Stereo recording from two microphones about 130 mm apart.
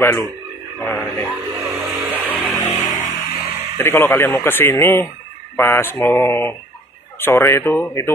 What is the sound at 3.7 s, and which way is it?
Speech, 20° left (ahead or behind).